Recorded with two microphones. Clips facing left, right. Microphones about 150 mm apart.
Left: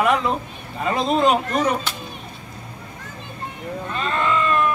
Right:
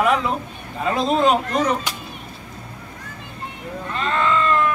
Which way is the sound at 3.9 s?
15° left (ahead or behind).